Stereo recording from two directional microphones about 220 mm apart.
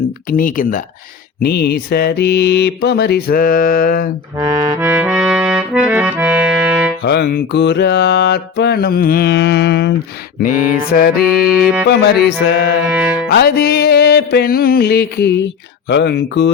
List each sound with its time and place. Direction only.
0.3 s speech: 40° left (ahead or behind)
1.4 s music: 45° left (ahead or behind)
4.4 s accordion: 15° right (ahead or behind)
7.0 s music: 50° left (ahead or behind)
10.9 s speech: 40° left (ahead or behind)
11.9 s music: 45° left (ahead or behind)
12.8 s music: 5° right (ahead or behind)
13.3 s music: 45° left (ahead or behind)